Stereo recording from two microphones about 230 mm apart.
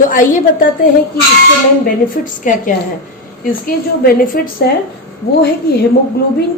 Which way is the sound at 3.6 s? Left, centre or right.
Left.